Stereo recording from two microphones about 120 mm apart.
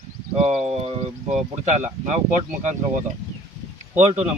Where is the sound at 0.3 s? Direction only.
70° right (ahead or behind).